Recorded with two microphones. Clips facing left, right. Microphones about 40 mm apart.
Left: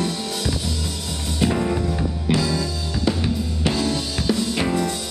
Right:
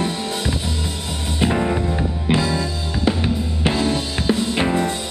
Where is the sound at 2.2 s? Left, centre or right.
Right.